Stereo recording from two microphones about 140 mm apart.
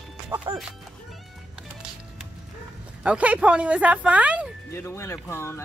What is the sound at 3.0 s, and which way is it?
Speech, 10° right (ahead or behind).